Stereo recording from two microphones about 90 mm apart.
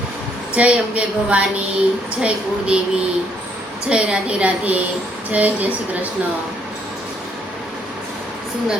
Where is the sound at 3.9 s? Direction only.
10° right (ahead or behind).